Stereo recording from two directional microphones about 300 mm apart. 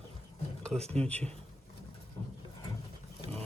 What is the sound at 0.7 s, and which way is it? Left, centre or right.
Speech, right.